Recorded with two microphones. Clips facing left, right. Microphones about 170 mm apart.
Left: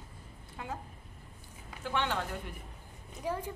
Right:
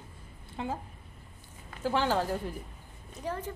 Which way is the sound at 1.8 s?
35° right (ahead or behind).